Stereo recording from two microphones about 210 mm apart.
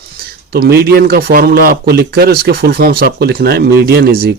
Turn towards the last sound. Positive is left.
turn(degrees=-45)  # may be behind; listen again after turning